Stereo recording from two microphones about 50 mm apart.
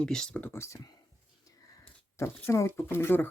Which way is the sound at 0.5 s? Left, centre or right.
Left.